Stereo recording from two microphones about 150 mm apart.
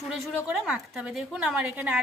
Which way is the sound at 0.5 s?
5° right (ahead or behind).